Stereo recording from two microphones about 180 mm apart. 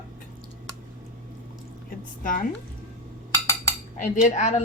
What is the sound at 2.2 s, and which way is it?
Speech, 50° left (ahead or behind).